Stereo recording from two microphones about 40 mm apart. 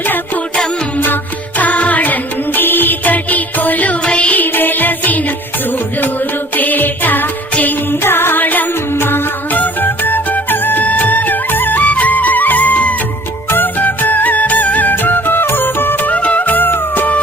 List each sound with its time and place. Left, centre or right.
0.9 s music: left
4.0 s music: left
4.4 s music: left
8.0 s music: left
8.4 s music: left
8.9 s music: left
9.5 s music: left
10.8 s music: left
11.8 s music: left
13.5 s music: left
16.0 s music: left